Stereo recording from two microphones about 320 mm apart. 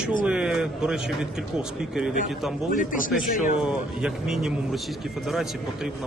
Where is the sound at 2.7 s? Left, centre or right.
Left.